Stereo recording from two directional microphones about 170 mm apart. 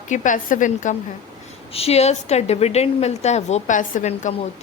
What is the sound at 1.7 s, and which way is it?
A woman's voice, 35° left (ahead or behind).